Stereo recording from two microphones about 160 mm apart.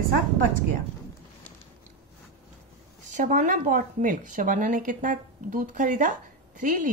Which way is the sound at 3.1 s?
50° right (ahead or behind).